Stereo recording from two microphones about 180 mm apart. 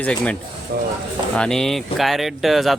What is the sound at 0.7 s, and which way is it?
Speech, 60° right (ahead or behind).